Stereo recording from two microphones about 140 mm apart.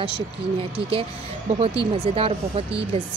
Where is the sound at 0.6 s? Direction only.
40° right (ahead or behind).